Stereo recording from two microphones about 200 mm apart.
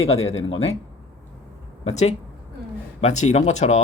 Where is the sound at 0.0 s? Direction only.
30° left (ahead or behind).